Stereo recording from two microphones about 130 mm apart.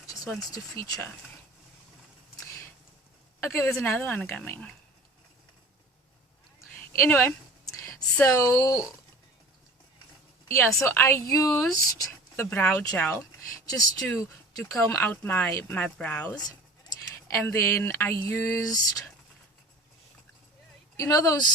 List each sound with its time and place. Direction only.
0.5 s a woman's voice: 25° left (ahead or behind)
3.4 s speech: 20° left (ahead or behind)
6.6 s a sound: 20° left (ahead or behind)
8.2 s a woman's voice: 25° left (ahead or behind)
10.5 s a woman's voice: 20° left (ahead or behind)
13.7 s speech: 30° left (ahead or behind); by 16.4 s 10° left (ahead or behind)
16.5 s speech: 30° left (ahead or behind)
20.9 s a woman's voice: 25° left (ahead or behind)